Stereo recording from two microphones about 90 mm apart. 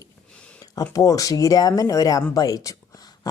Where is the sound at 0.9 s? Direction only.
40° left (ahead or behind).